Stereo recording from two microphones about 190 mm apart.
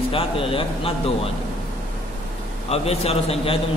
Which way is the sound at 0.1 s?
30° left (ahead or behind).